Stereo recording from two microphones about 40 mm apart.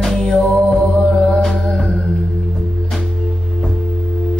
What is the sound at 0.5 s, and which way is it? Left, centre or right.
Music, centre.